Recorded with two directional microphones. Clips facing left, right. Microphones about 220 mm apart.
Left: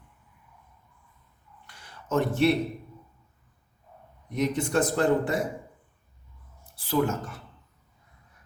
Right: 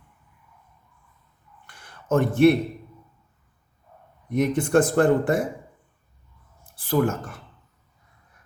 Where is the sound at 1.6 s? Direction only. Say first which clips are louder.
Right 7 dB; 50° right (ahead or behind).